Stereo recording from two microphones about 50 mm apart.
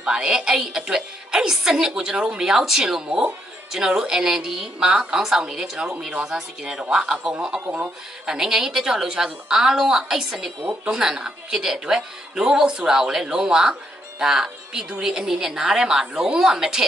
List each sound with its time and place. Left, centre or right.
0.0 s a woman's voice: centre